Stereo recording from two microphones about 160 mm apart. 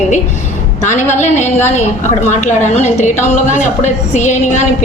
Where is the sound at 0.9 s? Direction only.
50° left (ahead or behind).